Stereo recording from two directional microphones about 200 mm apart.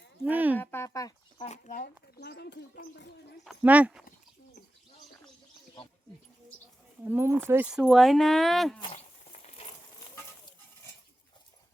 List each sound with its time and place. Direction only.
0.3 s speech: 10° right (ahead or behind)
0.6 s speech: 10° left (ahead or behind)
1.5 s speech: 35° left (ahead or behind); by 3.3 s 60° left (ahead or behind)
3.4 s speech: 5° right (ahead or behind)
7.0 s speech: 10° right (ahead or behind)